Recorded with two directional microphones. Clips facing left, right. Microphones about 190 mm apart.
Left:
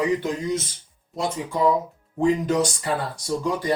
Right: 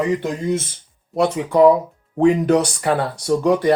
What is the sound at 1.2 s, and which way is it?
Speech, 65° right (ahead or behind).